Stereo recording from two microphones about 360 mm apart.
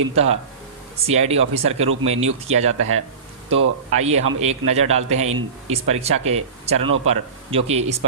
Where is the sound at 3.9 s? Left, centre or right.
Centre.